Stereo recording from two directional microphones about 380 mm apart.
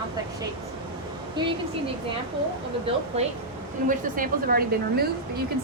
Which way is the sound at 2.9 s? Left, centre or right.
Centre.